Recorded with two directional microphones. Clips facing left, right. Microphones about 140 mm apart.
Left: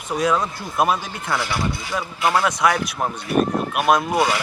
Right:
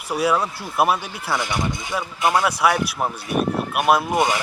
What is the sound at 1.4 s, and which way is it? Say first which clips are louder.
Speech: even; 20° right (ahead or behind).